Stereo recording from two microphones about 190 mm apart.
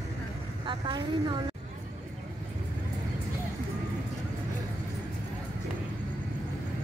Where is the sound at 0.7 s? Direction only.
25° right (ahead or behind).